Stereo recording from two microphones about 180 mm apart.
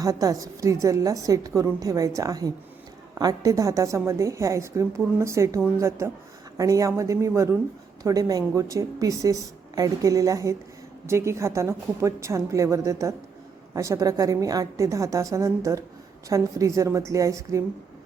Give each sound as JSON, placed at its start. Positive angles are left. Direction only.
{"t": 0.0, "sound": "a woman's voice", "side_deg": -20}